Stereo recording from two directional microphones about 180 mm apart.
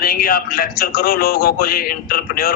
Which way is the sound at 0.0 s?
55° left (ahead or behind).